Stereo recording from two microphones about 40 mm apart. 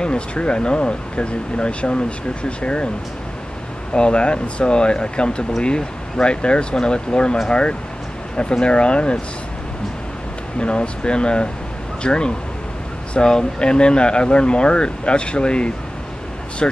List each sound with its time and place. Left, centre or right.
0.0 s speech: left
3.9 s speech: left
10.6 s speech: left